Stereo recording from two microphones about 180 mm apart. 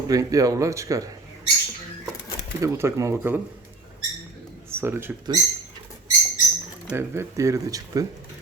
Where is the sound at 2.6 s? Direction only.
15° right (ahead or behind).